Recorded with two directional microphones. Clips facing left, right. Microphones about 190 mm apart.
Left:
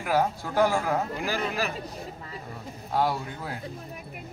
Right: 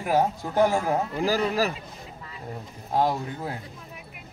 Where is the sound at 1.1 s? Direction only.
40° right (ahead or behind).